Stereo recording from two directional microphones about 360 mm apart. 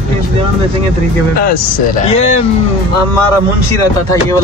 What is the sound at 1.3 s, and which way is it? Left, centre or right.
Speech, left.